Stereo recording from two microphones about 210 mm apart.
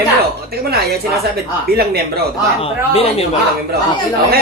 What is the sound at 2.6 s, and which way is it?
Speech, 30° left (ahead or behind).